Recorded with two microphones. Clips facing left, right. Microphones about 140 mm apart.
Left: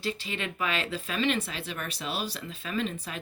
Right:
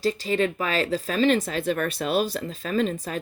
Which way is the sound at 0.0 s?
40° right (ahead or behind).